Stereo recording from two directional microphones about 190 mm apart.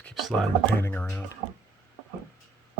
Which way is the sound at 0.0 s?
Centre (ahead or behind).